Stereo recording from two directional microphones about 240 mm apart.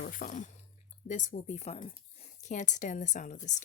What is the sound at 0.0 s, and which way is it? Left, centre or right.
Speech, left.